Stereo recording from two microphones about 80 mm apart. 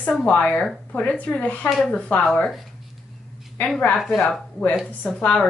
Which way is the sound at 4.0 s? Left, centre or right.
Centre.